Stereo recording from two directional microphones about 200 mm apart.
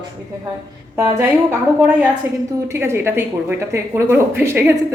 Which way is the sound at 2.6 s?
15° right (ahead or behind).